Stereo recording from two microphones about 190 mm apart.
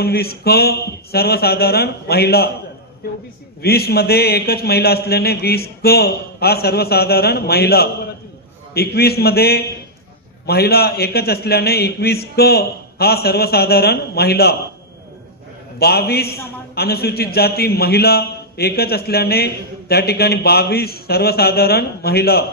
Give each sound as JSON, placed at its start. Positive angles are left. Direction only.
{"t": 0.0, "sound": "a man's voice", "side_deg": 55}
{"t": 3.6, "sound": "a man's voice", "side_deg": 55}
{"t": 15.8, "sound": "a man's voice", "side_deg": 55}